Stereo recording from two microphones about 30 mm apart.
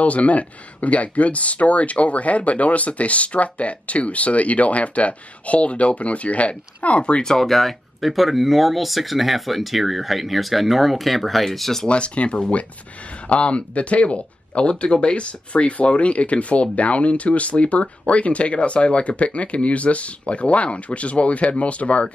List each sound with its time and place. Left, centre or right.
0.0 s speech: left
7.4 s speech: centre
11.9 s speech: left